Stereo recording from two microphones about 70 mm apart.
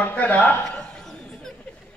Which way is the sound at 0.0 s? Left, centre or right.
Left.